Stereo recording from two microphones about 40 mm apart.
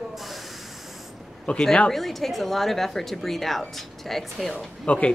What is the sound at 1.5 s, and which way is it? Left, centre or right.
Speech, left.